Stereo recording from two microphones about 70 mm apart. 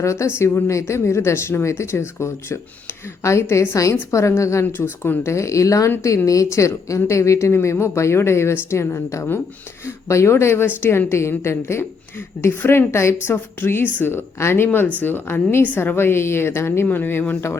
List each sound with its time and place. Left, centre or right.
0.0 s a woman's voice: left
16.8 s speech: left